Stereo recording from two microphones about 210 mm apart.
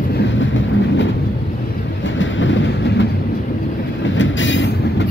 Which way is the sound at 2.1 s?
65° left (ahead or behind).